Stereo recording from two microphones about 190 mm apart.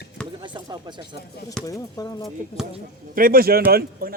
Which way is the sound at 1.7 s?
20° left (ahead or behind).